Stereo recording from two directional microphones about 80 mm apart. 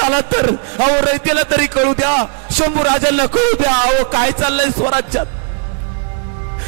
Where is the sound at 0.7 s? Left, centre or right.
Centre.